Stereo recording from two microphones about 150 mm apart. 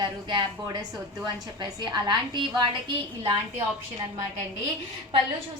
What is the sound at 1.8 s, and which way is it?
A woman's voice, 30° right (ahead or behind).